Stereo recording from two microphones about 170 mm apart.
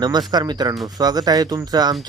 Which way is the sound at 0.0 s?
25° right (ahead or behind).